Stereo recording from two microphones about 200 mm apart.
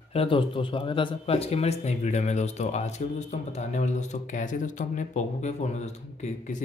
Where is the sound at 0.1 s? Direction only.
30° left (ahead or behind).